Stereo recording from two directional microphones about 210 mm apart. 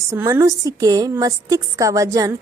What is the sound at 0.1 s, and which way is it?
A woman's voice, 15° right (ahead or behind).